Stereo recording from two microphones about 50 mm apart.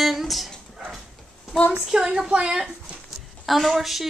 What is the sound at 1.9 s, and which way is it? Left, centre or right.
Speech, centre.